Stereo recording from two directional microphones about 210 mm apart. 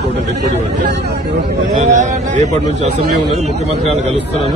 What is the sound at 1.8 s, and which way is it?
A man's voice, 35° right (ahead or behind).